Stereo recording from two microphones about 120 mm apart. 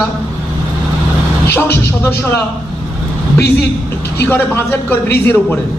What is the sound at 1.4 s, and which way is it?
Speech, 20° left (ahead or behind).